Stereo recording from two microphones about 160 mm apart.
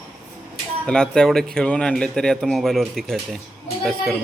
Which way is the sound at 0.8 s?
5° left (ahead or behind).